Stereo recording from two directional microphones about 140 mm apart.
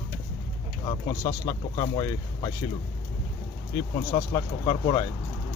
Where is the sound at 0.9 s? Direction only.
25° left (ahead or behind).